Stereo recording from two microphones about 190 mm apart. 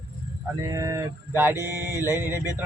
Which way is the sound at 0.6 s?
15° right (ahead or behind).